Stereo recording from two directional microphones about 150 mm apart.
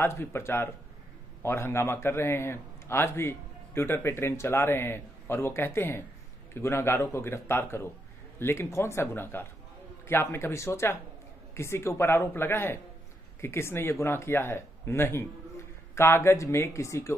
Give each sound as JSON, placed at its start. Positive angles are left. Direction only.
{"t": 0.0, "sound": "a man's voice", "side_deg": 15}